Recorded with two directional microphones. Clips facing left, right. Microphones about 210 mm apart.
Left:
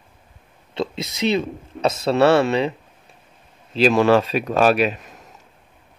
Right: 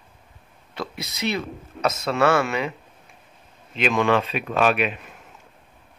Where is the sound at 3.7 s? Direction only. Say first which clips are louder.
Left 6 dB; 35° left (ahead or behind).